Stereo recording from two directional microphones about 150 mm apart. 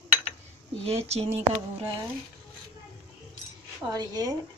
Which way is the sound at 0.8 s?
40° right (ahead or behind).